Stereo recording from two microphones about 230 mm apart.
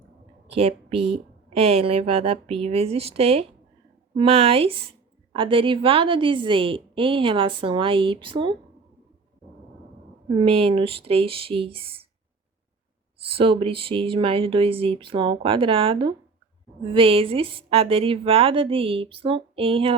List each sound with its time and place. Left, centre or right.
0.4 s a woman's voice: right
10.3 s a woman's voice: right
13.2 s a woman's voice: right